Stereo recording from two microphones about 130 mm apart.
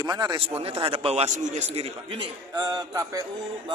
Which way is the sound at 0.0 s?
30° right (ahead or behind).